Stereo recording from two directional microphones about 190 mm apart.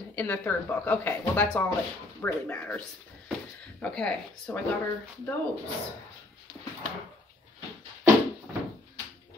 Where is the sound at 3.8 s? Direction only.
5° left (ahead or behind).